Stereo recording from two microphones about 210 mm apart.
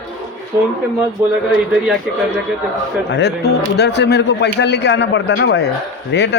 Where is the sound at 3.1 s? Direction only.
55° left (ahead or behind).